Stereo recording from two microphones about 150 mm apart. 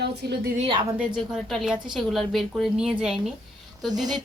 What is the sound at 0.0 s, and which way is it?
Speech, 90° right.